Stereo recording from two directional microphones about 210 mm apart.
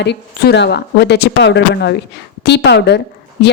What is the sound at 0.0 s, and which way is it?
A woman's voice, 55° left (ahead or behind).